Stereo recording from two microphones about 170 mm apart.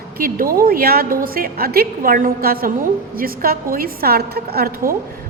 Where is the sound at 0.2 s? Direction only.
60° right (ahead or behind).